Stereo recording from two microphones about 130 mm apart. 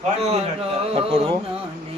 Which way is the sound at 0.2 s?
55° right (ahead or behind).